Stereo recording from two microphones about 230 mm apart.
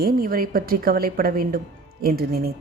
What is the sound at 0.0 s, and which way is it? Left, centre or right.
Speech, right.